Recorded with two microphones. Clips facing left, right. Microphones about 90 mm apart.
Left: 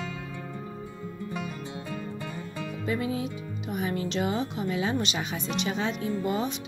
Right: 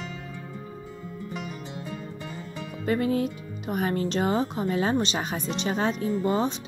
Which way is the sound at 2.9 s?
55° right (ahead or behind).